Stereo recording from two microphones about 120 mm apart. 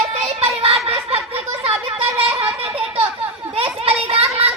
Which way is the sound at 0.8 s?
55° right (ahead or behind).